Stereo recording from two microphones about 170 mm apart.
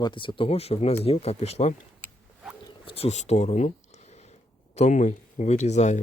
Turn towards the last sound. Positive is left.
turn(degrees=40)  # may be behind; listen again after turning